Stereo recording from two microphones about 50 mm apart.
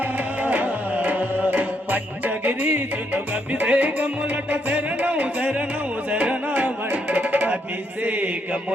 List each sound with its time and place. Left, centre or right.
0.4 s music: right